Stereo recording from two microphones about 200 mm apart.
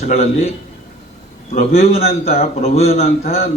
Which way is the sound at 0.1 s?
35° left (ahead or behind).